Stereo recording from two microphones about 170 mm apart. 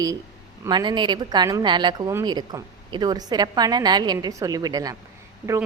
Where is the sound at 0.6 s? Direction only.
25° right (ahead or behind).